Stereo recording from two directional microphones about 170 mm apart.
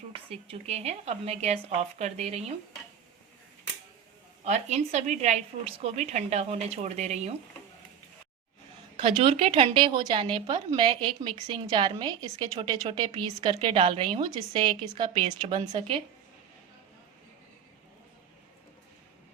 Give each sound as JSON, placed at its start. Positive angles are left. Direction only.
{"t": 0.1, "sound": "a woman's voice", "side_deg": -35}
{"t": 4.4, "sound": "a woman's voice", "side_deg": -40}
{"t": 9.0, "sound": "a woman's voice", "side_deg": -30}